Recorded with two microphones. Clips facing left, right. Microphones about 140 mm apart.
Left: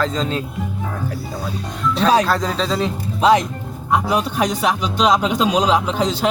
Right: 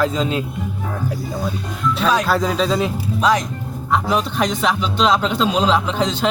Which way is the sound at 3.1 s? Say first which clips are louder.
Left 4 dB; 25° left (ahead or behind).